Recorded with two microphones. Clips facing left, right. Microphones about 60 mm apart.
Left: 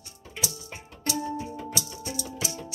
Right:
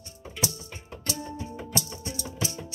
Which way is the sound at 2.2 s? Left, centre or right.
Right.